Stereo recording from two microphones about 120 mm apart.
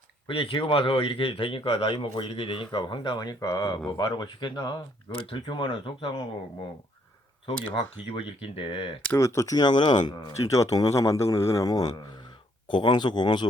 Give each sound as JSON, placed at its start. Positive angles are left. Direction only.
{"t": 0.3, "sound": "speech", "side_deg": 45}
{"t": 7.4, "sound": "speech", "side_deg": 45}
{"t": 9.1, "sound": "speech", "side_deg": 25}